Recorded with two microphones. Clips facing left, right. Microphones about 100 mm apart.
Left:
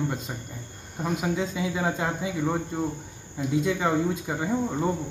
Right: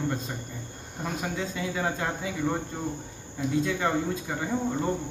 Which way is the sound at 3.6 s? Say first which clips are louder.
Left 4 dB; 10° left (ahead or behind).